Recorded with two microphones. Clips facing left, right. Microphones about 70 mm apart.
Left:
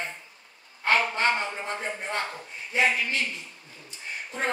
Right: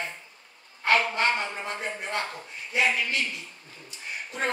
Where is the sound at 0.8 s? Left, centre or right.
Left.